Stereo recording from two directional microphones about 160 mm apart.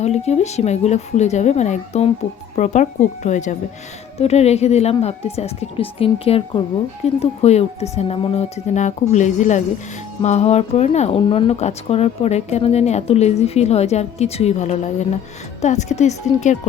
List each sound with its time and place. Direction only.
0.0 s speech: 40° left (ahead or behind)